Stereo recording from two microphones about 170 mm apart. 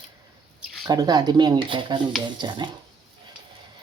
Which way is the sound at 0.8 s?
25° right (ahead or behind).